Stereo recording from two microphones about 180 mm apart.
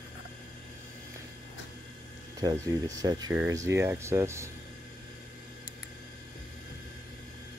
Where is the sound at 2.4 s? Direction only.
20° right (ahead or behind).